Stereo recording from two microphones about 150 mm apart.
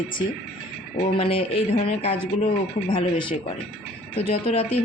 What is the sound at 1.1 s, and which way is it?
Speech, 40° left (ahead or behind).